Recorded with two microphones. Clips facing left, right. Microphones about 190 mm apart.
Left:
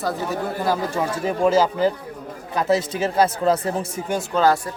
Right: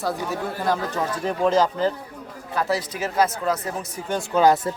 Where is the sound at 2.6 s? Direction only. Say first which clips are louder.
Left 4 dB; 20° left (ahead or behind).